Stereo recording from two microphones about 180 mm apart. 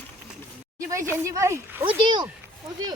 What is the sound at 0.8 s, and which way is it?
Speech, 15° right (ahead or behind).